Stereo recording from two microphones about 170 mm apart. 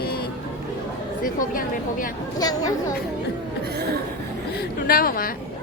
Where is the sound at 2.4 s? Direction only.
20° left (ahead or behind).